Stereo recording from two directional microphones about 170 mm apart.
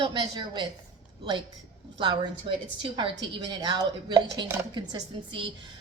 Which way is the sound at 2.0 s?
25° right (ahead or behind).